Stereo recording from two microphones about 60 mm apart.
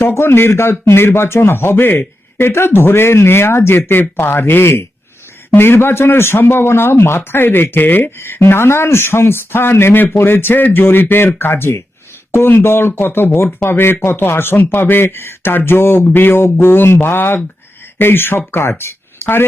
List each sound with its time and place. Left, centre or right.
0.0 s speech: left